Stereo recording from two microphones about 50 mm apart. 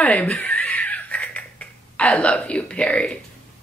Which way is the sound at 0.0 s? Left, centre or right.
Left.